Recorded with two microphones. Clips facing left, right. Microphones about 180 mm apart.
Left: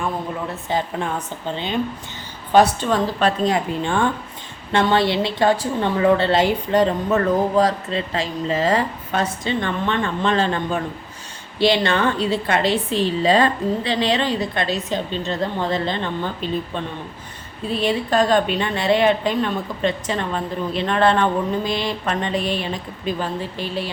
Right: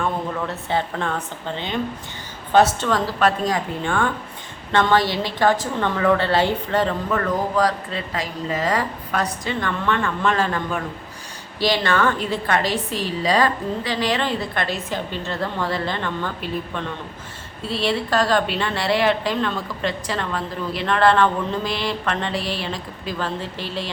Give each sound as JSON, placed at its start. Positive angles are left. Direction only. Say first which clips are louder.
{"t": 0.7, "sound": "a woman's voice", "louder": "left 1 dB", "side_deg": 15}
{"t": 2.8, "sound": "a woman's voice", "louder": "left 1 dB", "side_deg": 20}